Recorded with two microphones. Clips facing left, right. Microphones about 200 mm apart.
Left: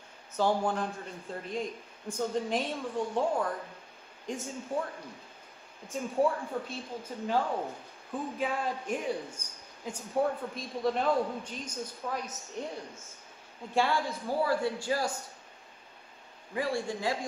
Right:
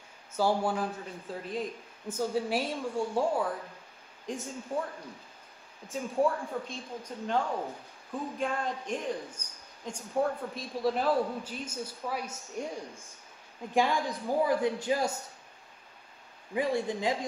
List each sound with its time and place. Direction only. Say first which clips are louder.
0.3 s a man's voice: even; 10° right (ahead or behind)
16.5 s a man's voice: right 2 dB; 20° right (ahead or behind)